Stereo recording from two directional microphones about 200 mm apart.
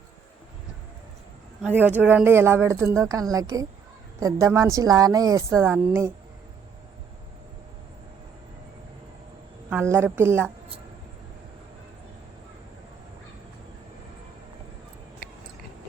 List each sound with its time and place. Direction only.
1.6 s a woman's voice: 10° right (ahead or behind)
9.6 s a woman's voice: 10° right (ahead or behind)